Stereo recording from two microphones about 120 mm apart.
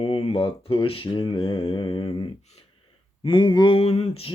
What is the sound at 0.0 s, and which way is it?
Mantra, 50° left (ahead or behind).